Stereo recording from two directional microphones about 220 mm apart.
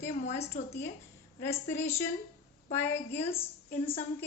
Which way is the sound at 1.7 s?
10° left (ahead or behind).